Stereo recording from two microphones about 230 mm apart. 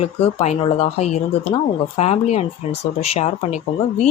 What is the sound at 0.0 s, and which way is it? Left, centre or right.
Speech, left.